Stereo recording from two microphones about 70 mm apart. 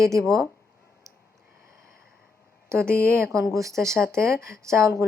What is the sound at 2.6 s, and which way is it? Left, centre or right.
A woman's voice, right.